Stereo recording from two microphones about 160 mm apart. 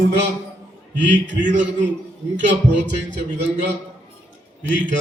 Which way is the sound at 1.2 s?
55° right (ahead or behind).